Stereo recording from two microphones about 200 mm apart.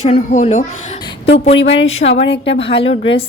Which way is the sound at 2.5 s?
30° left (ahead or behind).